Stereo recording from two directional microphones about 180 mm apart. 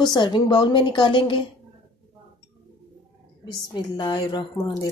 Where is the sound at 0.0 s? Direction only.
25° left (ahead or behind).